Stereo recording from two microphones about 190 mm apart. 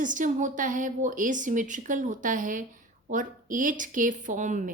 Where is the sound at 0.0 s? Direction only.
45° right (ahead or behind).